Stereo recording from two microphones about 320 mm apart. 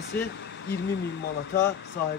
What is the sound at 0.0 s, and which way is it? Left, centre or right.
Speech, left.